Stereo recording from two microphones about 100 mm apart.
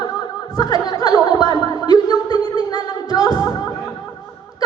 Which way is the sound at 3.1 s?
35° left (ahead or behind).